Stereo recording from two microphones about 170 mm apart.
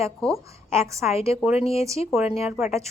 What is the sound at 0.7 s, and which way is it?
Speech, 15° right (ahead or behind).